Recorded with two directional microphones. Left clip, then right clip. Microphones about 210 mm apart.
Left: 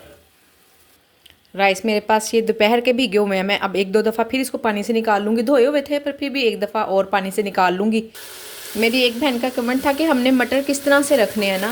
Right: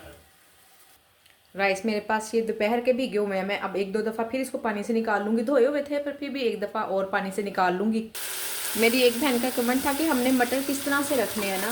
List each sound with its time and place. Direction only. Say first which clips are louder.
1.5 s speech: left 8 dB; 35° left (ahead or behind)
8.8 s speech: left 4 dB; 30° left (ahead or behind)